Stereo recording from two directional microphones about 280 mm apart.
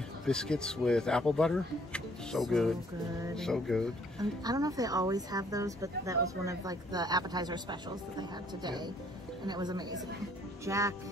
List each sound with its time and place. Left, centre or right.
0.2 s speech: centre
4.2 s speech: centre